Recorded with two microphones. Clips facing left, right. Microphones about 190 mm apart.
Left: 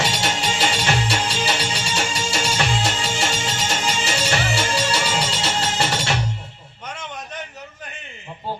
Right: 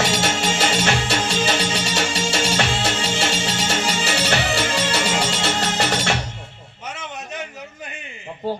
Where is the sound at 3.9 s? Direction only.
55° right (ahead or behind).